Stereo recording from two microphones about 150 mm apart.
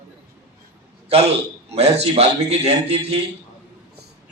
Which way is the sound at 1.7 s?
45° right (ahead or behind).